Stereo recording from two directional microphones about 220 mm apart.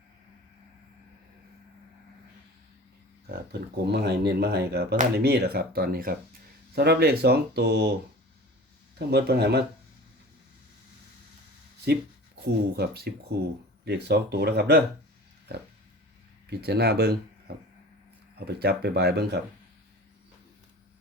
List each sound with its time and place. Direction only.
3.2 s speech: 45° right (ahead or behind)
9.0 s speech: 50° right (ahead or behind)
12.5 s speech: 45° right (ahead or behind)
16.5 s speech: 45° right (ahead or behind)
18.3 s speech: 45° right (ahead or behind)